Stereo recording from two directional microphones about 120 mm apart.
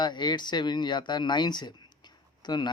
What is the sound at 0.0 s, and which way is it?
Speech, 40° left (ahead or behind).